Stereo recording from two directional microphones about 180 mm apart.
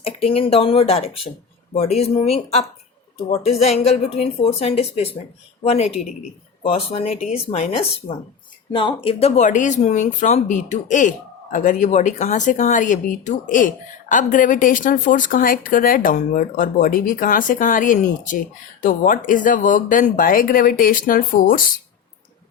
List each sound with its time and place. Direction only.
0.0 s speech: 30° left (ahead or behind); by 21.6 s 50° left (ahead or behind)